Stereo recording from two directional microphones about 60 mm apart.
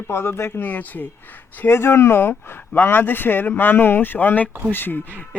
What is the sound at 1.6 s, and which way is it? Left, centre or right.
Speech, left.